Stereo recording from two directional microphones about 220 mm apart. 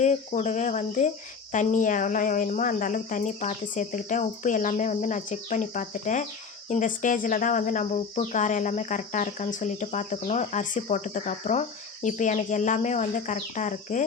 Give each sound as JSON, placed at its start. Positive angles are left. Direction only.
{"t": 0.0, "sound": "speech", "side_deg": 30}